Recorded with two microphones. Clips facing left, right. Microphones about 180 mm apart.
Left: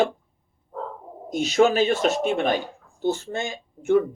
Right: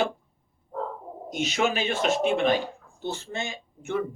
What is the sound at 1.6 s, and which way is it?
Speech, 40° left (ahead or behind).